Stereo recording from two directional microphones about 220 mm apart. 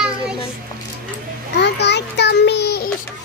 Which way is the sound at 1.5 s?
50° left (ahead or behind).